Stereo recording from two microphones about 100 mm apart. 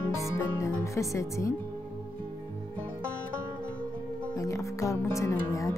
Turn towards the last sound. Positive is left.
turn(degrees=30)  # may be behind; listen again after turning